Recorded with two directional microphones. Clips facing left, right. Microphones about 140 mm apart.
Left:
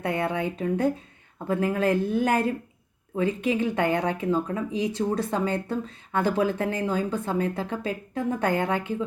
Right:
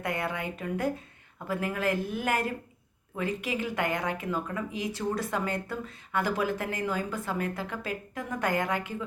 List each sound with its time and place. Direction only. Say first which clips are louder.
0.0 s speech: left 6 dB; 25° left (ahead or behind)